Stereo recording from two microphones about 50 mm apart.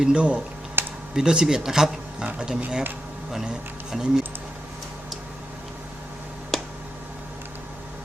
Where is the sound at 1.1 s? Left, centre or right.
Centre.